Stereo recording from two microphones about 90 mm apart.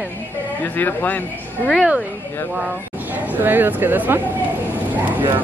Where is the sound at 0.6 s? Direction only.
20° left (ahead or behind).